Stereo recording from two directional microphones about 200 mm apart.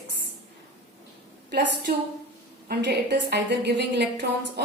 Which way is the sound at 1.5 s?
55° right (ahead or behind).